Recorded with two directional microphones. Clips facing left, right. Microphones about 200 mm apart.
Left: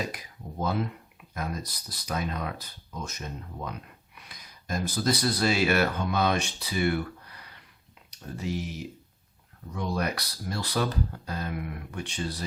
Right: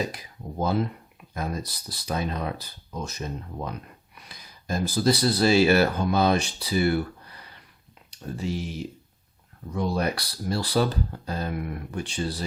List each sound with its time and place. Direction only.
0.1 s speech: 30° right (ahead or behind)
8.4 s speech: 30° right (ahead or behind)